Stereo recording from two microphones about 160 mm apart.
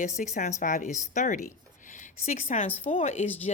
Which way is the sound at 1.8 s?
50° left (ahead or behind).